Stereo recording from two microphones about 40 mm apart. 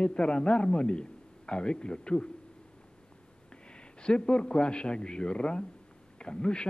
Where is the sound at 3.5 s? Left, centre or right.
Left.